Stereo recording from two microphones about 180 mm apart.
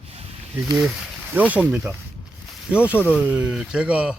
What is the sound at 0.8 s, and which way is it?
Speech, 5° right (ahead or behind).